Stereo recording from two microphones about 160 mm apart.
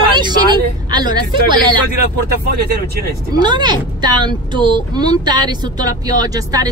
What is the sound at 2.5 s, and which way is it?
Speech, 75° right (ahead or behind).